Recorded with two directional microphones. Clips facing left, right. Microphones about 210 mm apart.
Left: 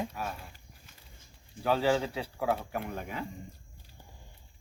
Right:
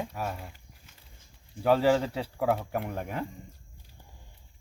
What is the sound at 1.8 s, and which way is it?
Speech, 40° right (ahead or behind).